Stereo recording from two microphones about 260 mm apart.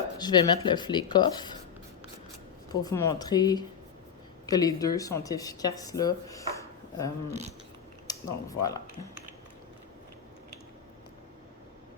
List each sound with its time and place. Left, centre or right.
0.2 s speech: centre
2.8 s speech: centre
7.3 s speech: right
8.0 s speech: centre